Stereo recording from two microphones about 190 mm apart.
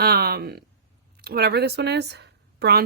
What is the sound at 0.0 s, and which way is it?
Speech, 55° right (ahead or behind).